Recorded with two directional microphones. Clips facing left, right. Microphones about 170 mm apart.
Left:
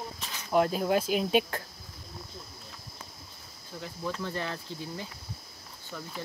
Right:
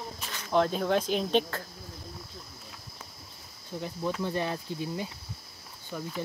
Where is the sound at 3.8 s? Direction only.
15° right (ahead or behind).